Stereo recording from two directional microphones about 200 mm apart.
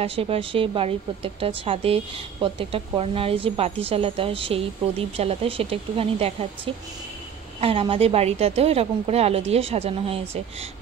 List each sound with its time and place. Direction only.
0.0 s speech: 30° right (ahead or behind)